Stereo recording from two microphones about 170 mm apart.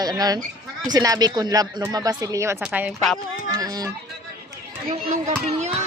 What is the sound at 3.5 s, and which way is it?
Speech, 20° right (ahead or behind).